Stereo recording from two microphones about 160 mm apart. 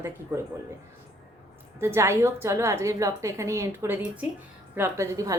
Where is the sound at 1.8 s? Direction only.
15° right (ahead or behind).